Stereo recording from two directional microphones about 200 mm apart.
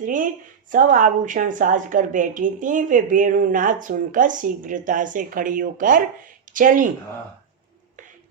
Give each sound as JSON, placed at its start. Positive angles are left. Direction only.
{"t": 0.0, "sound": "a woman's voice", "side_deg": -40}